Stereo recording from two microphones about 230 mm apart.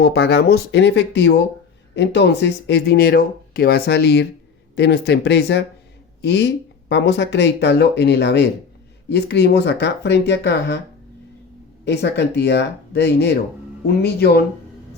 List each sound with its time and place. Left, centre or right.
0.0 s speech: left
11.9 s speech: left